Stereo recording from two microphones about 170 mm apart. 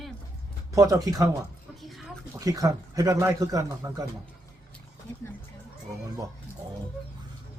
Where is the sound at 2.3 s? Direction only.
20° right (ahead or behind).